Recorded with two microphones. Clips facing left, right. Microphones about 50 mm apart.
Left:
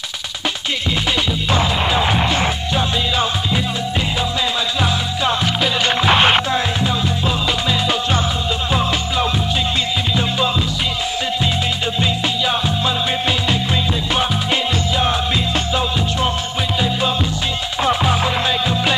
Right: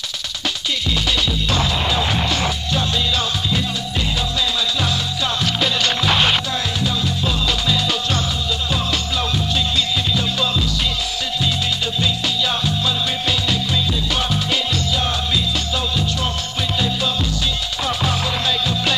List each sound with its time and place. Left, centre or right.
1.5 s music: left
5.6 s music: left
12.0 s music: left
14.1 s music: left
17.8 s music: left